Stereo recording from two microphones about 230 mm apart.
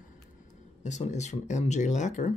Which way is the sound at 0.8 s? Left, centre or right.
Left.